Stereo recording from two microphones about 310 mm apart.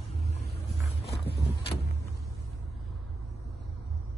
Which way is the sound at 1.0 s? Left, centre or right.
Left.